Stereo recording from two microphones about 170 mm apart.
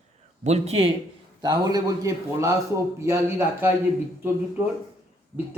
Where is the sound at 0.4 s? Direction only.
40° right (ahead or behind).